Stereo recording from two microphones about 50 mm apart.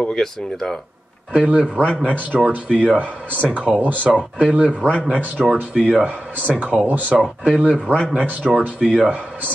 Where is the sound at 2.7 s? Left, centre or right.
Centre.